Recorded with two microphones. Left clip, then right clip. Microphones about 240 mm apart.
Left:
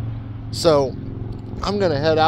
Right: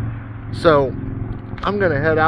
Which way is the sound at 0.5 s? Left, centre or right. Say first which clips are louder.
Right 2 dB; centre.